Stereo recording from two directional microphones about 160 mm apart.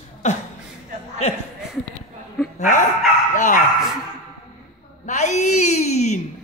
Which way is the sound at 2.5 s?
55° left (ahead or behind).